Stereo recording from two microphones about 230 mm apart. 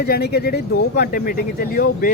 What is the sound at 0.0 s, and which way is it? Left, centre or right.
Speech, left.